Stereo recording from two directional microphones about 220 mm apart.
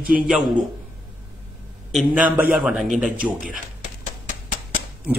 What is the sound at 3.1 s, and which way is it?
Speech, 40° right (ahead or behind).